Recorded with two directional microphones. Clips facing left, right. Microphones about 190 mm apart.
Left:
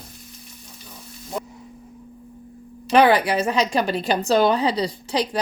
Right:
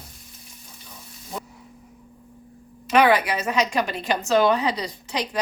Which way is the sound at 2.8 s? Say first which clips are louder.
Left 2 dB; 30° left (ahead or behind).